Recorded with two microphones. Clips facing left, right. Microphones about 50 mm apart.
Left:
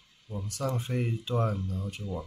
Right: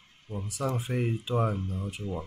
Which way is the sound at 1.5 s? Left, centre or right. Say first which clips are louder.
Right 1 dB; right.